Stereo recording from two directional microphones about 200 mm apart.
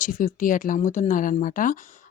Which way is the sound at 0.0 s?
40° left (ahead or behind).